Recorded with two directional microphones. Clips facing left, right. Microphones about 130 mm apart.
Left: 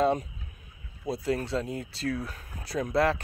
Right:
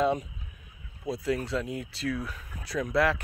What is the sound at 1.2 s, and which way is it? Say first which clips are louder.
Speech: even; 30° left (ahead or behind).